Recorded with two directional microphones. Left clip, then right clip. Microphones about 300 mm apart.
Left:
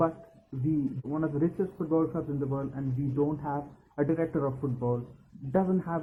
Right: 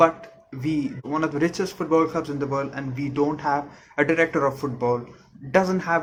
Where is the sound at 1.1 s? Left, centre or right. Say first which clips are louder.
Right 8 dB; right.